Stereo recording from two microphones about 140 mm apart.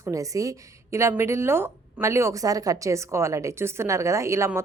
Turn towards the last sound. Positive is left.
turn(degrees=-20)  # may be behind; listen again after turning